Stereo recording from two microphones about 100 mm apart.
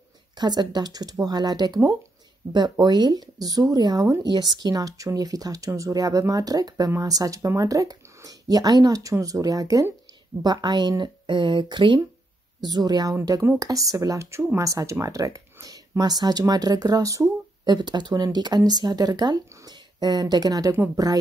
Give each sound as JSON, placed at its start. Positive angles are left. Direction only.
{"t": 0.4, "sound": "speech", "side_deg": -45}
{"t": 12.6, "sound": "speech", "side_deg": -45}
{"t": 17.6, "sound": "speech", "side_deg": -45}